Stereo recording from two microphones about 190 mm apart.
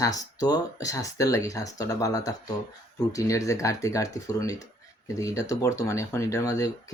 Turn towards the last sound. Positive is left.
turn(degrees=20)  # may be behind; listen again after turning